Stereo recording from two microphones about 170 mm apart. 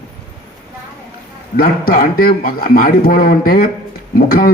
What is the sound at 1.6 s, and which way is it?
A man's voice, 60° left (ahead or behind).